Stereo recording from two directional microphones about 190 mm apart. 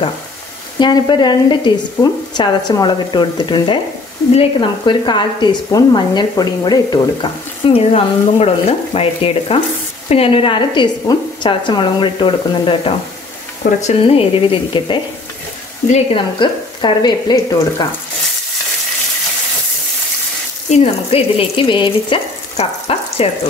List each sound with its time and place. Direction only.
0.7 s speech: 25° left (ahead or behind)
7.6 s frying: 30° left (ahead or behind)
10.0 s speech: 30° left (ahead or behind)
13.7 s speech: 40° left (ahead or behind); by 17.8 s 20° left (ahead or behind)
20.7 s frying: 35° left (ahead or behind)